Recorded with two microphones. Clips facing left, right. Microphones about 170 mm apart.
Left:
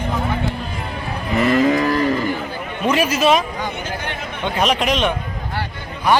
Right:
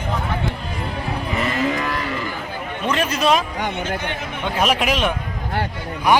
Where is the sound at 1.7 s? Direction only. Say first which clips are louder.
Left 6 dB; 35° left (ahead or behind).